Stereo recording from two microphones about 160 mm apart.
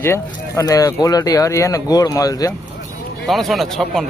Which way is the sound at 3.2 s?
Centre (ahead or behind).